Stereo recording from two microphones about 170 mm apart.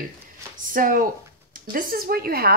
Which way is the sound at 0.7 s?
55° right (ahead or behind).